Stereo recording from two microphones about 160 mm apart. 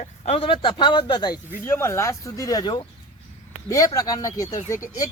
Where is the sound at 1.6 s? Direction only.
15° left (ahead or behind).